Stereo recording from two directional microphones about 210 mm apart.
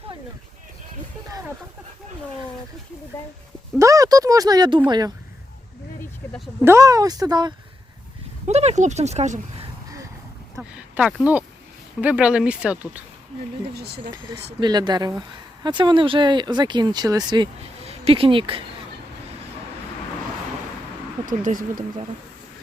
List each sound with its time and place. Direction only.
3.8 s speech: 15° right (ahead or behind)
6.6 s speech: 15° right (ahead or behind)
8.4 s speech: 30° right (ahead or behind)
10.6 s speech: 5° right (ahead or behind)
13.7 s speech: 50° right (ahead or behind)
14.6 s speech: 20° right (ahead or behind)
21.2 s speech: 40° right (ahead or behind)